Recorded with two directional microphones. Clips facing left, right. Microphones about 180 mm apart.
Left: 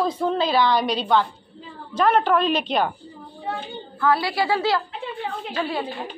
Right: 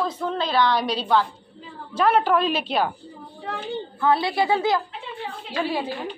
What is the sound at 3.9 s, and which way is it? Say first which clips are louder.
Speech: even; 20° right (ahead or behind).